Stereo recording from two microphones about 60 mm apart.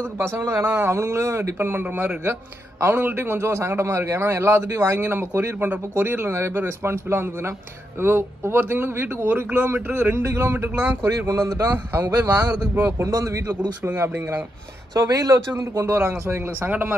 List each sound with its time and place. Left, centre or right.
0.2 s a man's voice: right
10.5 s speech: right
11.3 s speech: right
12.0 s speech: right
12.9 s speech: right
13.8 s a man's voice: right
15.0 s speech: right
15.7 s speech: right
16.0 s speech: right